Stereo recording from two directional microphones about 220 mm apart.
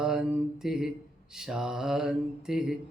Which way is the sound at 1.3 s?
Centre (ahead or behind).